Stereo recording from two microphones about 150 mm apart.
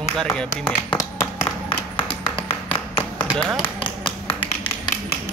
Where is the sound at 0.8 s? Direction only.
20° left (ahead or behind).